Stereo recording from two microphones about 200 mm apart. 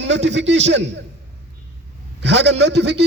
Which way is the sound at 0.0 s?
65° right (ahead or behind).